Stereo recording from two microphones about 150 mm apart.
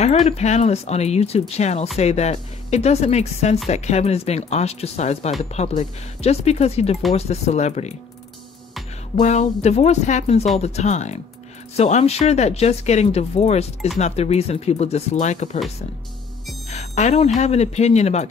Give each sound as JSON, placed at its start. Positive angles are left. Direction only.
{"t": 0.0, "sound": "speech", "side_deg": 45}
{"t": 9.2, "sound": "speech", "side_deg": 50}
{"t": 16.6, "sound": "music", "side_deg": 50}
{"t": 17.4, "sound": "speech", "side_deg": 45}